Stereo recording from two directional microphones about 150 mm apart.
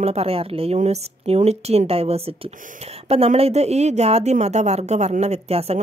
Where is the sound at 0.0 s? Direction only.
45° right (ahead or behind).